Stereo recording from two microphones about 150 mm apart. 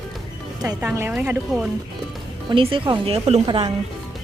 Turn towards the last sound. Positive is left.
turn(degrees=-35)  # may be behind; listen again after turning